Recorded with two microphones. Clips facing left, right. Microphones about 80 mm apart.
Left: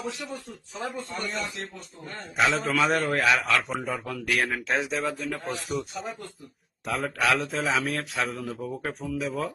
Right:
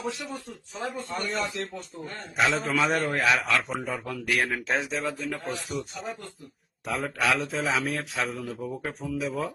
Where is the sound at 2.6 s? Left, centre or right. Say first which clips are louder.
Left 1 dB; centre.